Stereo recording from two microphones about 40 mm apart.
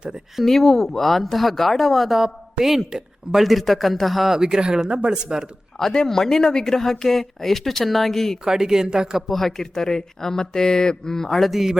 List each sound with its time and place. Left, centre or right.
0.4 s speech: centre
2.1 s speech: centre
4.4 s speech: centre
6.1 s speech: centre
8.4 s speech: centre
9.3 s speech: centre
11.5 s speech: centre